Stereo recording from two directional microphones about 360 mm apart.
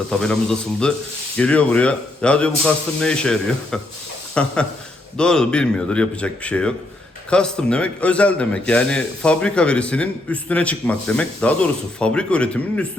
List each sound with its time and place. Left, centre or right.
0.1 s a man's voice: centre